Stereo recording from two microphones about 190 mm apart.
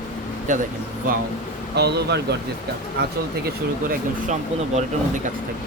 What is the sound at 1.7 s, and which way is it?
Speech, 60° right (ahead or behind).